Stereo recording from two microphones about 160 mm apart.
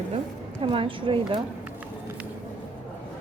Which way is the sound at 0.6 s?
35° right (ahead or behind).